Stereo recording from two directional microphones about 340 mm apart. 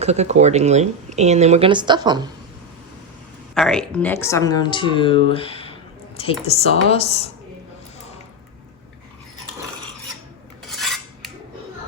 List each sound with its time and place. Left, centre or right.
0.0 s speech: centre
3.5 s speech: centre
10.7 s filing: centre